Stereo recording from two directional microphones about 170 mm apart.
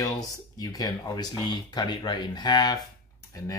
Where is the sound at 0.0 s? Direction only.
20° left (ahead or behind).